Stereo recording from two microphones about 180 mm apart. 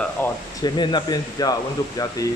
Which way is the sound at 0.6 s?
25° left (ahead or behind).